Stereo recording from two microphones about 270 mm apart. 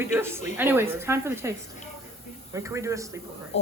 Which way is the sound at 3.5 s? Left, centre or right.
Left.